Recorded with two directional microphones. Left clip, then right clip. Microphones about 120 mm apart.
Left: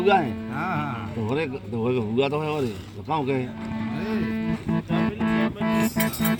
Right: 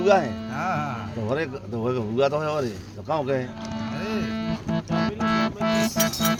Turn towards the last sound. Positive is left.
turn(degrees=0)  # may be behind; listen again after turning